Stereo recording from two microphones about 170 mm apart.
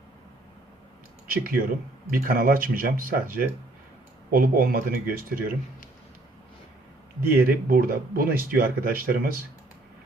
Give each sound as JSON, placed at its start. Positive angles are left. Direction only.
{"t": 1.3, "sound": "speech", "side_deg": -60}
{"t": 7.3, "sound": "speech", "side_deg": -65}